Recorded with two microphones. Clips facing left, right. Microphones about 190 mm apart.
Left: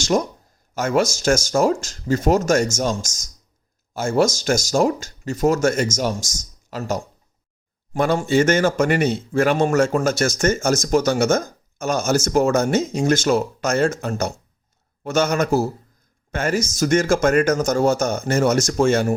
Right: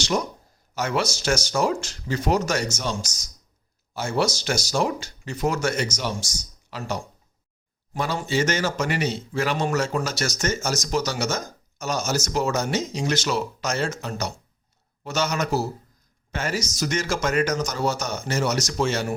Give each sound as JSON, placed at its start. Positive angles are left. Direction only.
{"t": 0.0, "sound": "a man's voice", "side_deg": 45}